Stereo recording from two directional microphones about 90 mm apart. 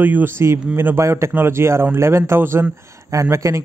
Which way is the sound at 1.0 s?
30° right (ahead or behind).